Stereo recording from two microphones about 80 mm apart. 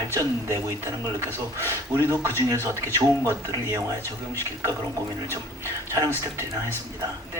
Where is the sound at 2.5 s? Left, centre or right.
Right.